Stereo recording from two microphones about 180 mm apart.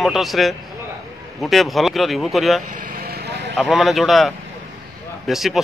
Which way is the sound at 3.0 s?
60° right (ahead or behind).